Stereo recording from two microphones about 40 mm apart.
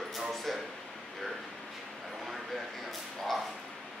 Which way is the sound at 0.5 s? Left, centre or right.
Centre.